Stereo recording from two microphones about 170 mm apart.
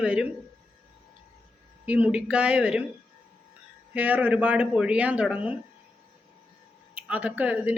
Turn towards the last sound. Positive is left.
turn(degrees=-10)  # may be behind; listen again after turning